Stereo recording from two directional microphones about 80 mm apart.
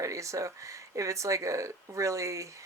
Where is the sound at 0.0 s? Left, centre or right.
Right.